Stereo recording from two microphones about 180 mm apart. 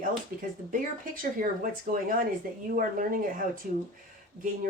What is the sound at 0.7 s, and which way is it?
Speech, 50° right (ahead or behind).